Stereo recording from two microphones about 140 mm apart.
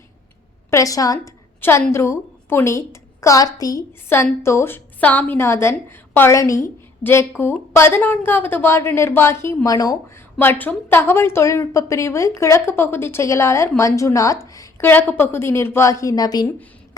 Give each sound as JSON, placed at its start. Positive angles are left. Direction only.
{"t": 0.7, "sound": "a woman's voice", "side_deg": 25}
{"t": 10.3, "sound": "a woman's voice", "side_deg": 15}